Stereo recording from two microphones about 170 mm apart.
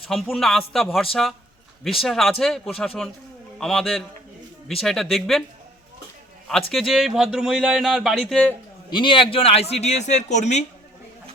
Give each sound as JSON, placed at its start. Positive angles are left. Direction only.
{"t": 0.1, "sound": "speech", "side_deg": 0}
{"t": 6.7, "sound": "speech", "side_deg": 0}
{"t": 8.9, "sound": "a man's voice", "side_deg": 30}